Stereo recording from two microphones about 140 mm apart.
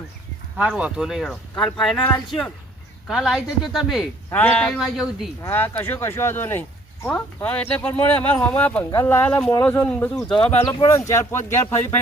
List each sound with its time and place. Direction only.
0.5 s speech: 5° right (ahead or behind)
4.3 s speech: 10° left (ahead or behind)
5.4 s speech: 15° left (ahead or behind)
10.9 s speech: 20° left (ahead or behind)